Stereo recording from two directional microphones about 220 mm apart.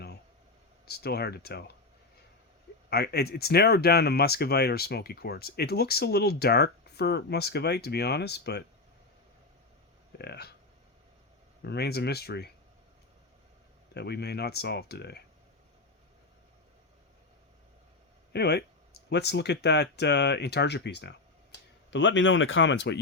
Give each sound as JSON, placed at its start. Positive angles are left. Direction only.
{"t": 0.9, "sound": "speech", "side_deg": 45}
{"t": 2.9, "sound": "speech", "side_deg": 45}
{"t": 10.2, "sound": "speech", "side_deg": 45}
{"t": 11.6, "sound": "speech", "side_deg": 50}
{"t": 13.9, "sound": "speech", "side_deg": 50}
{"t": 18.3, "sound": "speech", "side_deg": 50}